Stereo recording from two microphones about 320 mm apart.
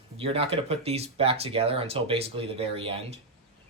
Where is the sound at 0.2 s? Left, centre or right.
Centre.